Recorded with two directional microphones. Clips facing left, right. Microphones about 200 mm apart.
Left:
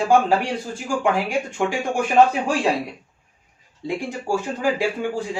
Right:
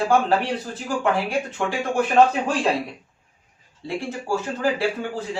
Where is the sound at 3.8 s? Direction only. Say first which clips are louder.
Left 1 dB; 15° left (ahead or behind).